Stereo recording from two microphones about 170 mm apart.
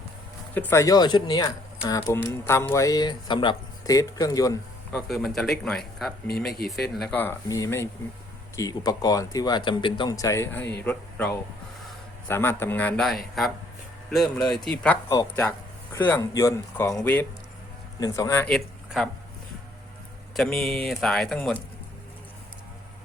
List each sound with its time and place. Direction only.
0.5 s speech: 10° left (ahead or behind)
4.9 s speech: centre (ahead or behind)
6.6 s speech: 65° left (ahead or behind)
6.9 s speech: 5° left (ahead or behind)
18.5 s a sound: centre (ahead or behind)
20.3 s speech: 5° left (ahead or behind)